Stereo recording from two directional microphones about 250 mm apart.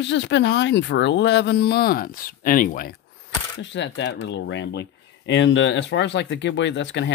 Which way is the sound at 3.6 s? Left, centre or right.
Left.